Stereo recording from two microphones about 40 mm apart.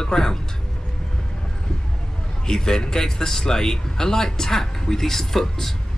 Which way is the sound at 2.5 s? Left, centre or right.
Centre.